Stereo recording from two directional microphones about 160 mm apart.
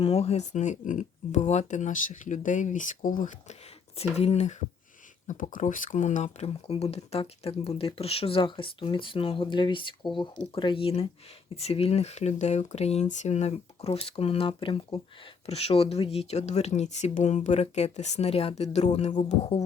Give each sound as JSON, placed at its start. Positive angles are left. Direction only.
{"t": 0.0, "sound": "speech", "side_deg": 40}
{"t": 4.2, "sound": "speech", "side_deg": 45}
{"t": 5.3, "sound": "speech", "side_deg": 55}